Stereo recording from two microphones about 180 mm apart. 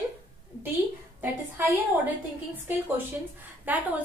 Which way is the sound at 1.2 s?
10° right (ahead or behind).